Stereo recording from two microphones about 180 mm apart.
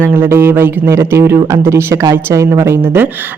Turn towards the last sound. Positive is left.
turn(degrees=-10)  # may be behind; listen again after turning